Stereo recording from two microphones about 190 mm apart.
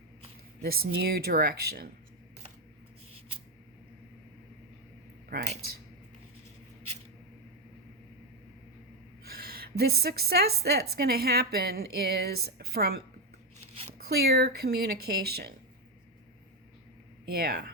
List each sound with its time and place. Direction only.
0.6 s speech: 55° right (ahead or behind)
5.3 s speech: 40° right (ahead or behind)
9.2 s a woman's voice: 55° right (ahead or behind)
14.1 s a woman's voice: 55° right (ahead or behind)
17.2 s a woman's voice: 55° right (ahead or behind)